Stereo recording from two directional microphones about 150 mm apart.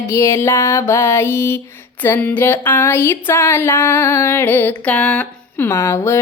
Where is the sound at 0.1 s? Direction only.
20° left (ahead or behind).